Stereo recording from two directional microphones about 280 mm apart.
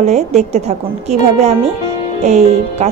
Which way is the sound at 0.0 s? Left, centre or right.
Right.